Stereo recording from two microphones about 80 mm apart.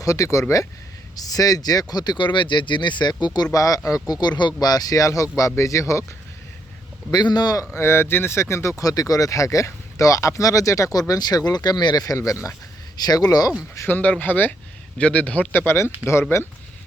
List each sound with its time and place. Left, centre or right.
0.0 s speech: left
1.1 s speech: left
7.1 s speech: left
7.7 s speech: left
8.8 s speech: left
12.1 s speech: left
13.0 s speech: left
13.8 s a man's voice: left
15.5 s speech: left